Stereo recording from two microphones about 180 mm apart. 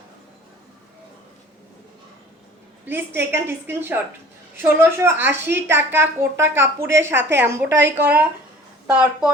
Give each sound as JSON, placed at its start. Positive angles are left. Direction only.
{"t": 2.8, "sound": "a woman's voice", "side_deg": -10}